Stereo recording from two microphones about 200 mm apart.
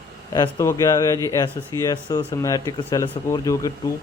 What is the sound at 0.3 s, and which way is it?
A man's voice, 15° left (ahead or behind).